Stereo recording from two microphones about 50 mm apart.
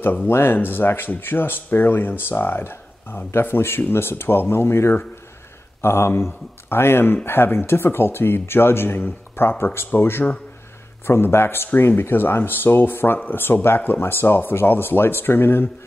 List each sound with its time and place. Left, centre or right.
0.3 s a man's voice: left